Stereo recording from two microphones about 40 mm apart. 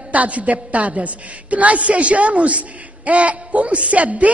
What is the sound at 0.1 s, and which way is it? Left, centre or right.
Speech, right.